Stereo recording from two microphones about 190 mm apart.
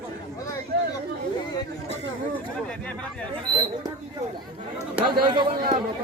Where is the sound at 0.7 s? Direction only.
55° right (ahead or behind).